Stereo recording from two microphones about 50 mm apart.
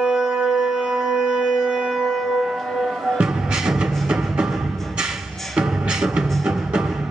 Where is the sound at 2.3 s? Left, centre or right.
Centre.